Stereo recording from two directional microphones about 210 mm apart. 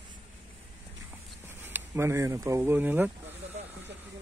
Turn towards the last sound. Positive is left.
turn(degrees=-10)  # may be behind; listen again after turning